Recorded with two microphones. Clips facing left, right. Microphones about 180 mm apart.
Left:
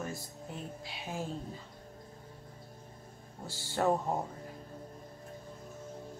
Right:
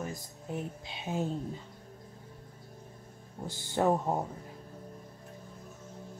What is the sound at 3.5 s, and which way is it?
Speech, 20° right (ahead or behind).